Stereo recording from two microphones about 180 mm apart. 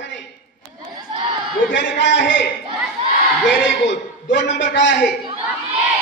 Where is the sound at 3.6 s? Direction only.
80° left.